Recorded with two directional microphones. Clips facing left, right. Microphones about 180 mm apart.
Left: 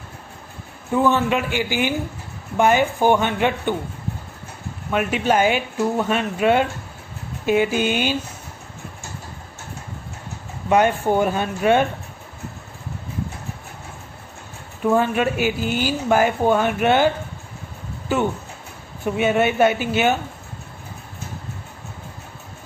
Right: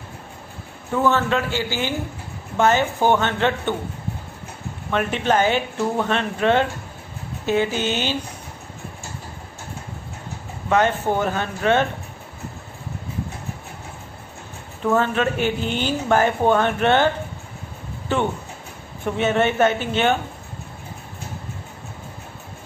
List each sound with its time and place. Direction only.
0.9 s speech: 15° left (ahead or behind)
4.9 s speech: 10° left (ahead or behind)
10.7 s speech: 15° left (ahead or behind)
14.8 s speech: 10° left (ahead or behind)
18.1 s speech: 5° left (ahead or behind)